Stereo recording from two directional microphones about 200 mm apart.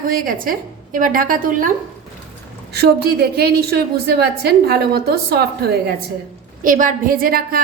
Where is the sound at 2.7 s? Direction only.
50° right (ahead or behind).